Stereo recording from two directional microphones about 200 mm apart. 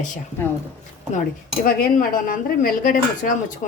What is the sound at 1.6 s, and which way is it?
Speech, 45° left (ahead or behind).